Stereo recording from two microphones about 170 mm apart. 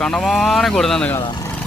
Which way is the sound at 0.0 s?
5° left (ahead or behind).